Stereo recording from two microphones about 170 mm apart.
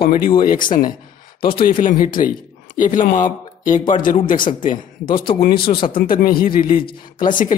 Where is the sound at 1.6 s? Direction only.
55° left (ahead or behind).